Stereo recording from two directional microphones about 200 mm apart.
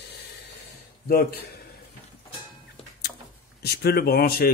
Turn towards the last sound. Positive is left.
turn(degrees=50)  # may be behind; listen again after turning